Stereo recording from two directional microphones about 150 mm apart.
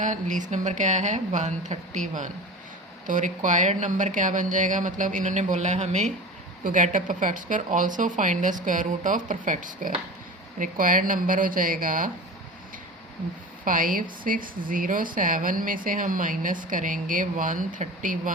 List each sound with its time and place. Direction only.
0.0 s speech: 55° right (ahead or behind)
6.7 s a woman's voice: 60° right (ahead or behind)
13.7 s speech: 65° right (ahead or behind)